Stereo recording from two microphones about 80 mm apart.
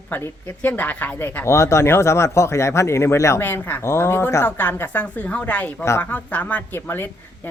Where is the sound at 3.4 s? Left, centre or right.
Left.